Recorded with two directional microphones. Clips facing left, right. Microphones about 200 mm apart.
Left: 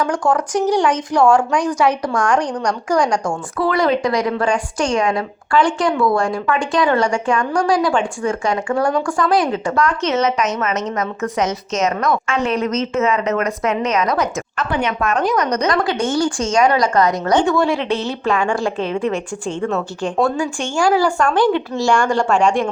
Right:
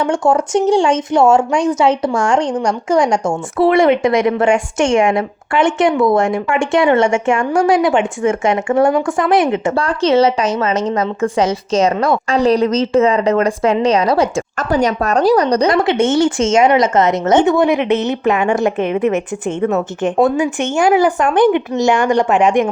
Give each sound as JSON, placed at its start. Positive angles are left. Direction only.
{"t": 0.0, "sound": "speech", "side_deg": -25}
{"t": 14.5, "sound": "speech", "side_deg": -40}